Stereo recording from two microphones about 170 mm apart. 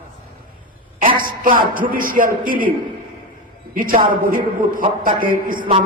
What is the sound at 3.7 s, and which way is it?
A man's voice, 55° right (ahead or behind).